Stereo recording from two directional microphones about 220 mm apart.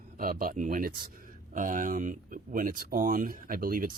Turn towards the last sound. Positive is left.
turn(degrees=-40)  # may be behind; listen again after turning